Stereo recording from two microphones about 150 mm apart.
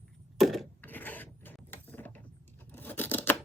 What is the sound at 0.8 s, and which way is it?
Filing, 10° left (ahead or behind).